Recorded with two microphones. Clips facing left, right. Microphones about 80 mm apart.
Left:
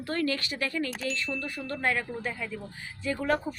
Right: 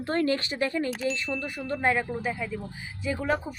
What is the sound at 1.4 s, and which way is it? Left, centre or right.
Speech, centre.